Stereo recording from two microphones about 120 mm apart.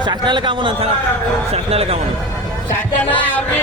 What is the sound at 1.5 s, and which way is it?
Speech, 55° right (ahead or behind).